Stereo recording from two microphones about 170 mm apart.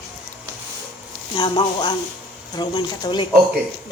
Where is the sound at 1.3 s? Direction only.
30° left (ahead or behind).